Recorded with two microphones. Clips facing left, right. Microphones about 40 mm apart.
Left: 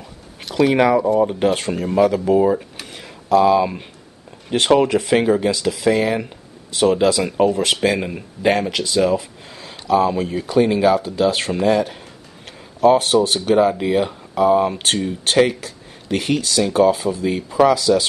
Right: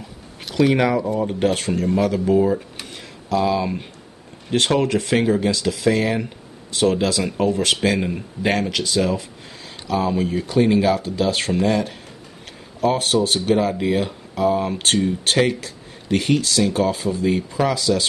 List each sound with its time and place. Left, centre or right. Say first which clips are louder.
0.5 s speech: left 3 dB; centre
2.3 s speech: even; centre
2.8 s a sound: left 1 dB; centre
4.5 s speech: left 4 dB; centre